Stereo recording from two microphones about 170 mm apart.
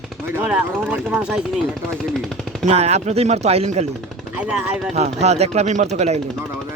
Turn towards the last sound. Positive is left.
turn(degrees=-40)  # may be behind; listen again after turning